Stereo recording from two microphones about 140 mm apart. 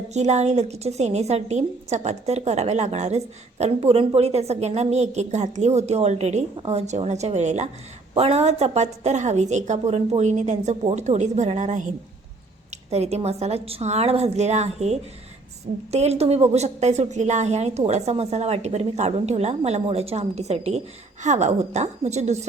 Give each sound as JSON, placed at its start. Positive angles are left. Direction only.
{"t": 0.1, "sound": "a woman's voice", "side_deg": -55}
{"t": 12.9, "sound": "a woman's voice", "side_deg": -50}